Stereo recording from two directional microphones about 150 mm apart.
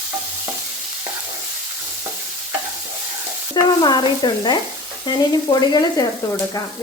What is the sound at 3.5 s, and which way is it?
Frying, 30° left (ahead or behind).